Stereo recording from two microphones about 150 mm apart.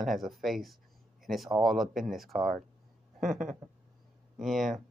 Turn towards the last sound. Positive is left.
turn(degrees=0)  # may be behind; listen again after turning